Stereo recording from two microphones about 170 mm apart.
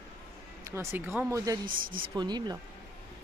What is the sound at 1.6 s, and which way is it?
Speech, 55° right (ahead or behind).